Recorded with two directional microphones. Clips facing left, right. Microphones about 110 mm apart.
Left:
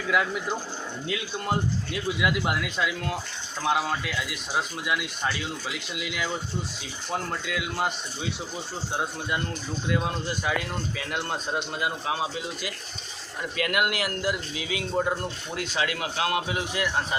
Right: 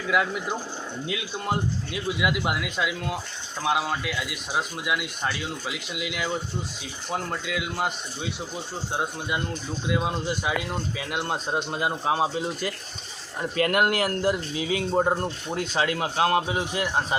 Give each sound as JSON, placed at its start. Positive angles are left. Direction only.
{"t": 0.1, "sound": "speech", "side_deg": -5}